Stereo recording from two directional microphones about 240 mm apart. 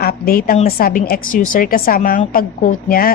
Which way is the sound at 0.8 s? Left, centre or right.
Left.